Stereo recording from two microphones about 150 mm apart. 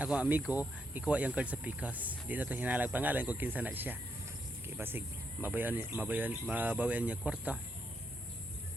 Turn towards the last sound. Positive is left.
turn(degrees=-10)  # may be behind; listen again after turning